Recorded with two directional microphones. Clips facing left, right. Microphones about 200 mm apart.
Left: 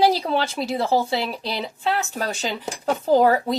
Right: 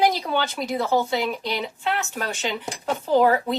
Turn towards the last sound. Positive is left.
turn(degrees=40)  # may be behind; listen again after turning